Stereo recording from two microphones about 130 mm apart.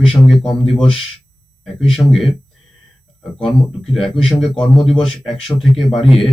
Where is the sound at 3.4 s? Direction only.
5° left (ahead or behind).